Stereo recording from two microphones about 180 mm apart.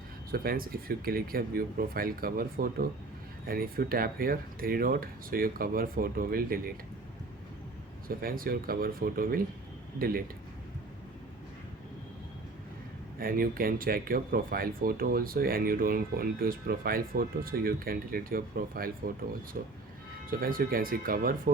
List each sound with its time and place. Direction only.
0.3 s speech: 55° right (ahead or behind)
8.0 s speech: 55° right (ahead or behind)
13.1 s speech: 55° right (ahead or behind)